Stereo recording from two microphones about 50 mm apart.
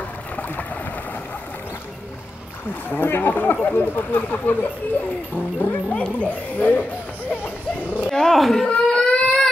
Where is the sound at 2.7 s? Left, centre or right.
Left.